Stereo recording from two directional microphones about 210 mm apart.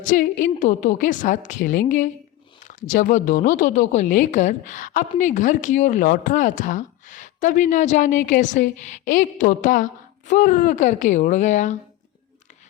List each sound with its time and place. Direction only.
0.0 s speech: 40° left (ahead or behind)